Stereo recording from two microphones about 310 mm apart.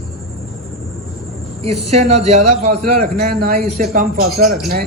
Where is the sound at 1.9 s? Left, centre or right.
Right.